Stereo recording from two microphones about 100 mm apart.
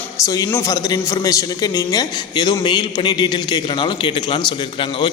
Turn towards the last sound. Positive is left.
turn(degrees=55)  # may be behind; listen again after turning